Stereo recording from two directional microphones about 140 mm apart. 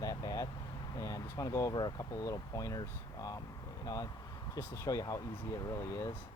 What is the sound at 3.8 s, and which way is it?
Speech, 25° left (ahead or behind).